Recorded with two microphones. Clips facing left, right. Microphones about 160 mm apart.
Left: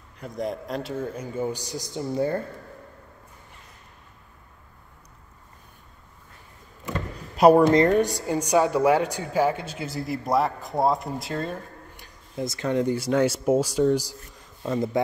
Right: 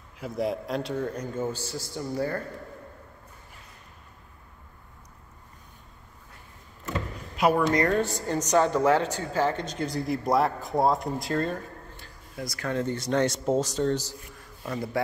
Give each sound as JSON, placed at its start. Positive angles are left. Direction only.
{"t": 0.2, "sound": "a woman's voice", "side_deg": 0}
{"t": 7.3, "sound": "speech", "side_deg": 35}
{"t": 7.7, "sound": "a woman's voice", "side_deg": 20}
{"t": 12.0, "sound": "speech", "side_deg": 25}